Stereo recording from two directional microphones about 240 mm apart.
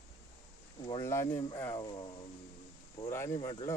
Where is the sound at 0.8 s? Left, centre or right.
Left.